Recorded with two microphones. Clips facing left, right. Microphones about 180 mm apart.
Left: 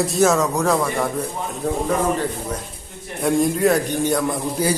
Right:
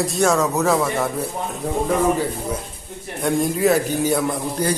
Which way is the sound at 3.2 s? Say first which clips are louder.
Left 1 dB; centre (ahead or behind).